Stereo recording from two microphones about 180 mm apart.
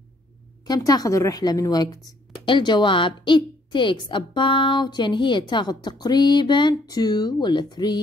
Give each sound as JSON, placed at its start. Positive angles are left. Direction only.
{"t": 0.7, "sound": "a woman's voice", "side_deg": 20}